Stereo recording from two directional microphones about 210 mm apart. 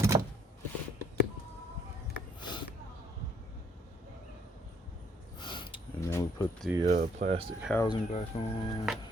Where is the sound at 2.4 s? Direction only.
20° left (ahead or behind).